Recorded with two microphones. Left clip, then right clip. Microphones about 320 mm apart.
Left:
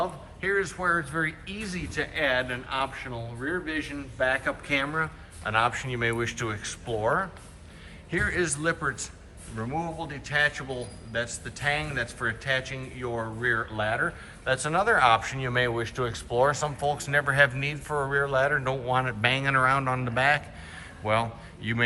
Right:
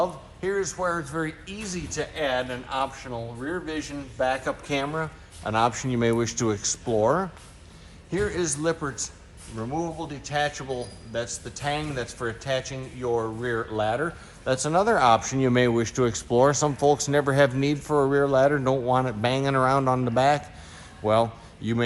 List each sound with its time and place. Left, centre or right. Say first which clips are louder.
0.0 s a man's voice: right 3 dB; centre